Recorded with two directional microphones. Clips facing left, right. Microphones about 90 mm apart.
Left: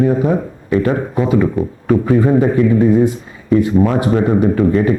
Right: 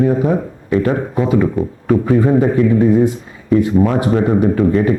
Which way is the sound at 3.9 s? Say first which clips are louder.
Even; 25° left (ahead or behind).